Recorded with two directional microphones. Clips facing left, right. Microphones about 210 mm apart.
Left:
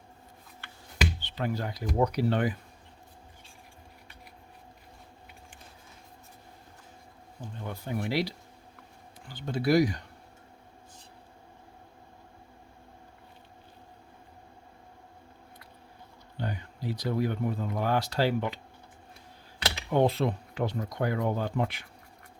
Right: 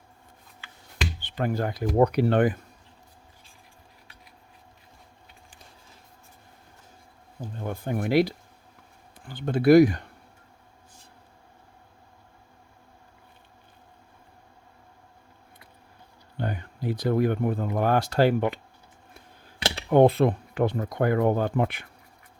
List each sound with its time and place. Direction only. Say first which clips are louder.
1.2 s speech: right 5 dB; 50° right (ahead or behind)
7.4 s speech: right 6 dB; 50° right (ahead or behind)
16.4 s speech: right 4 dB; 55° right (ahead or behind)
19.9 s speech: right 7 dB; 55° right (ahead or behind)